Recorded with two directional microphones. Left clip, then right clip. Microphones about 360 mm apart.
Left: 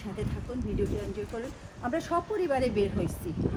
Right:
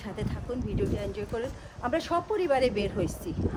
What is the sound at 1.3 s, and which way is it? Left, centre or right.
A woman's voice, centre.